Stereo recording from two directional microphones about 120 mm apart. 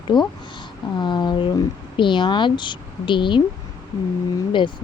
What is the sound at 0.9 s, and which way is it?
Speech, 40° left (ahead or behind).